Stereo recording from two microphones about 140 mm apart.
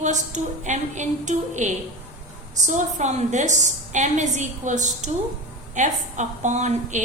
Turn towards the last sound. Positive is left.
turn(degrees=-60)  # may be behind; listen again after turning